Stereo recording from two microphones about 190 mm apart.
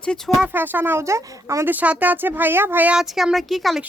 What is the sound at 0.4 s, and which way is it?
Speech, 10° right (ahead or behind).